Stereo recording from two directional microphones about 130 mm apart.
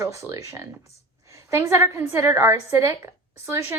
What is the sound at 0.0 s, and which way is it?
Speech, 20° right (ahead or behind).